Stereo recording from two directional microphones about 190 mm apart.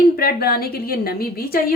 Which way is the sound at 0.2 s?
55° left (ahead or behind).